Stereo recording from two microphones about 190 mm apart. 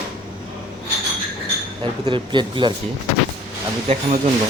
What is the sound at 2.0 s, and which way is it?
Speech, 25° right (ahead or behind).